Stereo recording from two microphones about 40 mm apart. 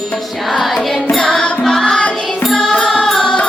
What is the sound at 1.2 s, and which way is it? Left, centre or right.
Music, centre.